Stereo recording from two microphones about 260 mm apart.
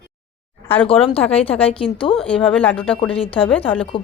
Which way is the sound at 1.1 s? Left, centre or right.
Left.